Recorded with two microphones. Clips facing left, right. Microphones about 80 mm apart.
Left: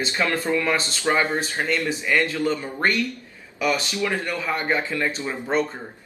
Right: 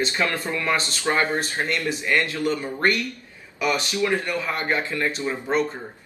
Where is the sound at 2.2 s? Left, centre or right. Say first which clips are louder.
Left 1 dB; left.